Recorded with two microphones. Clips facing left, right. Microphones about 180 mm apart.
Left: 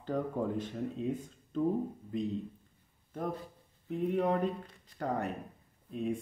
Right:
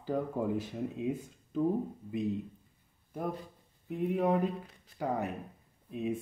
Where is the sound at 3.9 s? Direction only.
Centre (ahead or behind).